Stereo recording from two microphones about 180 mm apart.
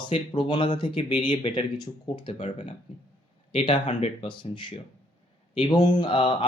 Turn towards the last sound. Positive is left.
turn(degrees=25)  # may be behind; listen again after turning